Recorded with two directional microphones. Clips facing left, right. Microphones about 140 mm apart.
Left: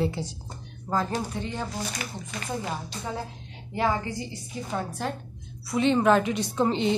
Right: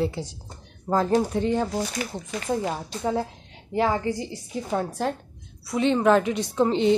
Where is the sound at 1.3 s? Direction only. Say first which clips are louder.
Right 9 dB; 40° right (ahead or behind).